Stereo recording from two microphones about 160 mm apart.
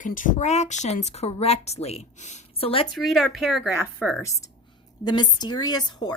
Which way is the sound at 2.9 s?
Centre (ahead or behind).